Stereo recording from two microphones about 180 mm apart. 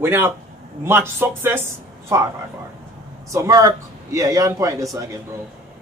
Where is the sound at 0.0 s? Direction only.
15° right (ahead or behind).